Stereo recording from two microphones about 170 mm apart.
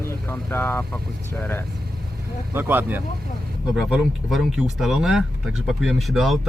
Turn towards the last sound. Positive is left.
turn(degrees=0)  # may be behind; listen again after turning